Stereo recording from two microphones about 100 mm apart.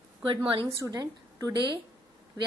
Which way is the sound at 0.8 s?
40° right (ahead or behind).